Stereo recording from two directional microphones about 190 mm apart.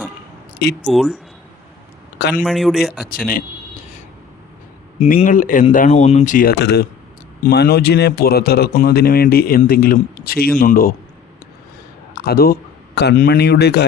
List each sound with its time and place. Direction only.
0.9 s speech: centre (ahead or behind)
2.1 s a sound: 60° left (ahead or behind)
2.4 s speech: centre (ahead or behind)
5.0 s speech: 45° left (ahead or behind)
12.1 s a man's voice: 55° left (ahead or behind)